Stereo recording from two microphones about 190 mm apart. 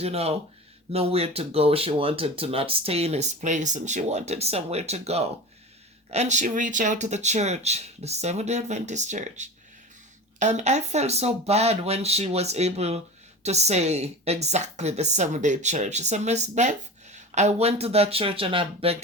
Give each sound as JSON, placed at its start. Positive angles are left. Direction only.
{"t": 0.0, "sound": "a woman's voice", "side_deg": -30}